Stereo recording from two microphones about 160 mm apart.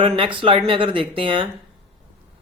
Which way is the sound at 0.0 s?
30° right (ahead or behind).